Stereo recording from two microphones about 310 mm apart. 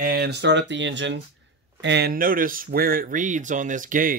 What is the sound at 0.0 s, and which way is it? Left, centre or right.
Speech, right.